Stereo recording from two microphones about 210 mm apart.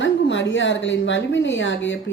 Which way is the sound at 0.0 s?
60° left (ahead or behind).